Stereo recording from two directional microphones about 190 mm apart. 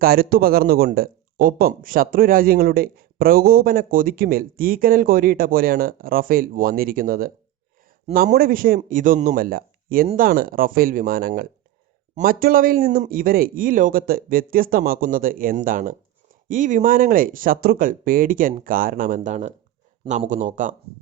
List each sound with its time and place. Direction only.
0.0 s speech: 50° right (ahead or behind)